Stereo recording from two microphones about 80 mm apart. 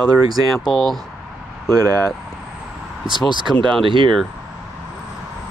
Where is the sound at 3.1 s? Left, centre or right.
Left.